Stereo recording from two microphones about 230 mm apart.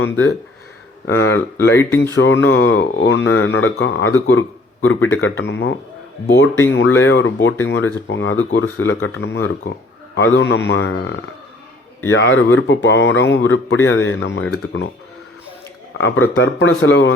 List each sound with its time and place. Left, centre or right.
0.0 s speech: left
1.7 s speech: centre
2.1 s speech: left
5.3 s a man's voice: left
12.1 s a man's voice: left
16.0 s speech: left
16.4 s a man's voice: left